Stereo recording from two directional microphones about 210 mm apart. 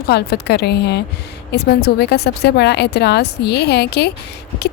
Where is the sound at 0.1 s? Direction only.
50° left (ahead or behind).